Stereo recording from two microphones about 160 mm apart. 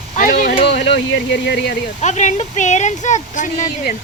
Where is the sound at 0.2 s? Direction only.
55° left (ahead or behind).